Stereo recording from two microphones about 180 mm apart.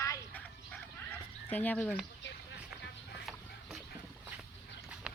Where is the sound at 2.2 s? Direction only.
75° left (ahead or behind).